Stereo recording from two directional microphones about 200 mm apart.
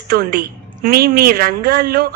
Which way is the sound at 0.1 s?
50° right (ahead or behind).